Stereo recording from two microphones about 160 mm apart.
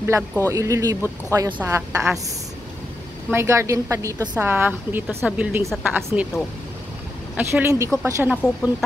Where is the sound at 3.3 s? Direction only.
15° right (ahead or behind).